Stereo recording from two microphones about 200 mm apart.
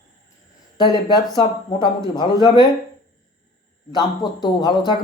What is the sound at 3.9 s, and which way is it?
A man's voice, 20° left (ahead or behind).